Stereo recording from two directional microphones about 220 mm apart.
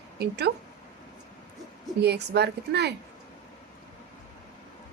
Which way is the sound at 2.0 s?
50° right (ahead or behind).